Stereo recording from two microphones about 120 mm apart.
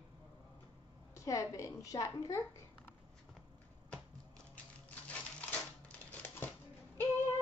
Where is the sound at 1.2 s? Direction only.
25° left (ahead or behind).